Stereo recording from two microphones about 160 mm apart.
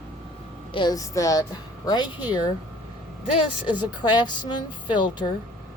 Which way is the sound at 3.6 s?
30° left (ahead or behind).